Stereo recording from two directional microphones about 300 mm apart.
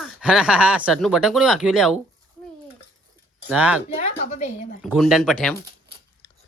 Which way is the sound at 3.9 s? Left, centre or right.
Left.